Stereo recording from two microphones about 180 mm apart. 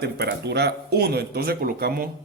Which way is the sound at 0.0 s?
65° right (ahead or behind).